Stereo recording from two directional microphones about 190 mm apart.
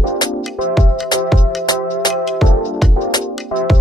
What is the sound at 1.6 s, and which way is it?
Music, 20° left (ahead or behind).